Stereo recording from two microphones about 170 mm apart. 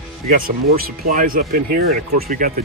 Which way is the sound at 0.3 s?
60° right (ahead or behind).